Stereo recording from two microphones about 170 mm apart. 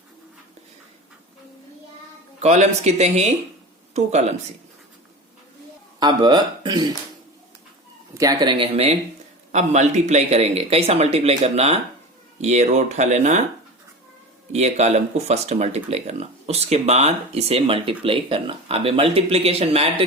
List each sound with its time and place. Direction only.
2.4 s speech: 40° right (ahead or behind)
6.0 s speech: 25° right (ahead or behind)
8.1 s speech: 20° right (ahead or behind); by 13.4 s 45° right (ahead or behind)
14.5 s speech: 40° right (ahead or behind)